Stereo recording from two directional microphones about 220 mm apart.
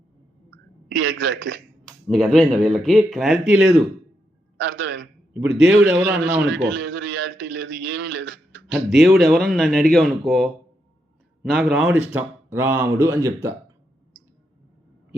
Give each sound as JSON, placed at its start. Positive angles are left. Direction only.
{"t": 0.9, "sound": "a man's voice", "side_deg": -50}
{"t": 1.8, "sound": "speech", "side_deg": 5}
{"t": 4.6, "sound": "a man's voice", "side_deg": -55}
{"t": 5.3, "sound": "speech", "side_deg": -5}
{"t": 6.5, "sound": "a man's voice", "side_deg": -50}
{"t": 8.6, "sound": "a man's voice", "side_deg": 0}